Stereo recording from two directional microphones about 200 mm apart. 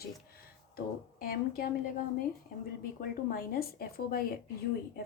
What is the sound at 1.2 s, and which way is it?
Speech, 45° left (ahead or behind).